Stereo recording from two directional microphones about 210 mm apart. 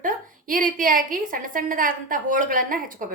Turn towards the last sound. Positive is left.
turn(degrees=-40)  # may be behind; listen again after turning